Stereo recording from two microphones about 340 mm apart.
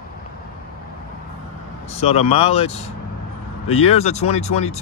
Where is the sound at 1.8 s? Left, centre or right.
Centre.